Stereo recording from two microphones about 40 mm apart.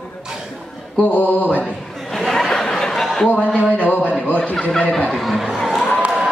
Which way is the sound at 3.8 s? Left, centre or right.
Left.